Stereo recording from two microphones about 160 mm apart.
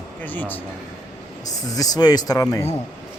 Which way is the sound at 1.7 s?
25° left (ahead or behind).